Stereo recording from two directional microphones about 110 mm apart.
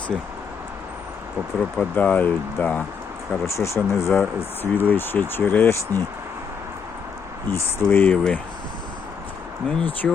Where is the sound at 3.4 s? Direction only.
25° left (ahead or behind).